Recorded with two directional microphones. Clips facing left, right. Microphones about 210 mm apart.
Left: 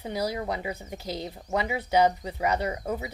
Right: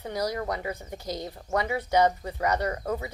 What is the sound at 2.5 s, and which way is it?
Speech, 25° left (ahead or behind).